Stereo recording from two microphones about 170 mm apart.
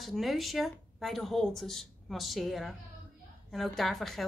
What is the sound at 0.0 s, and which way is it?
A woman's voice, centre (ahead or behind).